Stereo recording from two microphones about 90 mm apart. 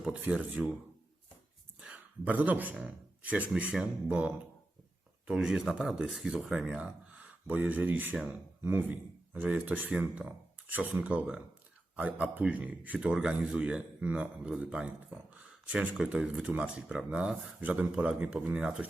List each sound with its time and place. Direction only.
0.0 s speech: 15° right (ahead or behind)
0.6 s speech: 5° right (ahead or behind)
1.8 s a sound: 15° right (ahead or behind)
2.7 s speech: 15° right (ahead or behind)
8.1 s speech: 5° right (ahead or behind)